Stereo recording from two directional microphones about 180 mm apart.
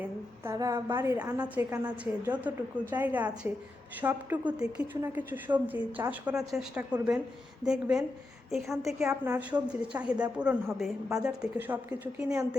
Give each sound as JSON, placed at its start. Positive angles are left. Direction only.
{"t": 0.0, "sound": "a woman's voice", "side_deg": -15}
{"t": 9.0, "sound": "a woman's voice", "side_deg": -10}